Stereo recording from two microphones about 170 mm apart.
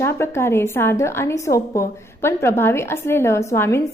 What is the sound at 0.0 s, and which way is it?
A woman's voice, 15° left (ahead or behind).